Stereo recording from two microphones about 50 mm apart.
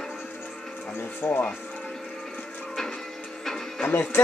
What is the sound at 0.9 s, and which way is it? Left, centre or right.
Music, left.